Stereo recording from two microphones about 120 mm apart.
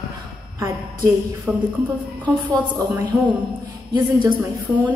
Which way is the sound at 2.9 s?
15° right (ahead or behind).